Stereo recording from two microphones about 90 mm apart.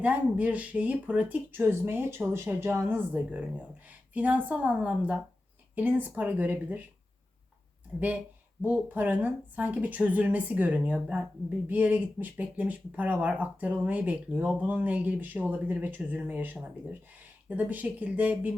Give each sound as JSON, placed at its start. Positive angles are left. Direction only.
{"t": 0.0, "sound": "speech", "side_deg": -15}
{"t": 3.1, "sound": "speech", "side_deg": -15}
{"t": 7.9, "sound": "speech", "side_deg": -10}
{"t": 8.6, "sound": "speech", "side_deg": -20}